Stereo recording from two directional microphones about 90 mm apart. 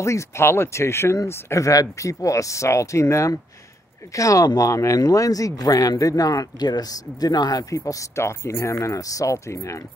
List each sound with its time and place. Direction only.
0.0 s speech: 35° left (ahead or behind)